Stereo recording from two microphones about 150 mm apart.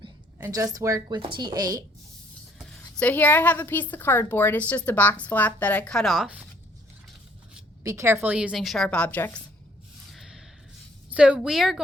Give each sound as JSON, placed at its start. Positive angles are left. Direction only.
{"t": 0.3, "sound": "a woman's voice", "side_deg": -20}
{"t": 2.7, "sound": "a woman's voice", "side_deg": 5}
{"t": 7.9, "sound": "a woman's voice", "side_deg": -20}
{"t": 10.1, "sound": "a sound", "side_deg": 0}
{"t": 11.1, "sound": "a woman's voice", "side_deg": -5}